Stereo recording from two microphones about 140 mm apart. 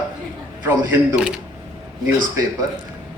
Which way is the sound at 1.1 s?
5° right (ahead or behind).